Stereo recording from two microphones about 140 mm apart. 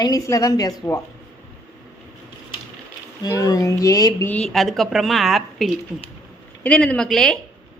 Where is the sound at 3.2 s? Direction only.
25° left (ahead or behind).